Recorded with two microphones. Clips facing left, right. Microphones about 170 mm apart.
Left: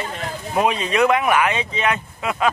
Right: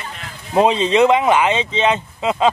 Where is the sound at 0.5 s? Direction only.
25° right (ahead or behind).